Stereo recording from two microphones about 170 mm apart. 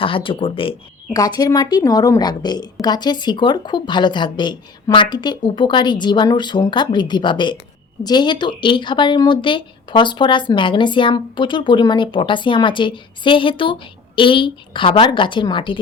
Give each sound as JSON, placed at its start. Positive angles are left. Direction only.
{"t": 0.0, "sound": "speech", "side_deg": 30}
{"t": 1.1, "sound": "speech", "side_deg": 20}